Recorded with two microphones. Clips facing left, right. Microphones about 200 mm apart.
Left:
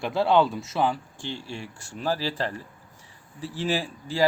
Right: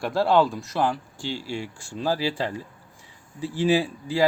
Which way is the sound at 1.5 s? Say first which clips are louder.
Right 5 dB; 10° right (ahead or behind).